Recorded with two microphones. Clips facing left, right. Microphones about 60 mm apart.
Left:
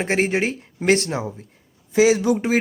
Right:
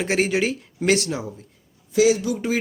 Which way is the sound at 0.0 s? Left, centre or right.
Left.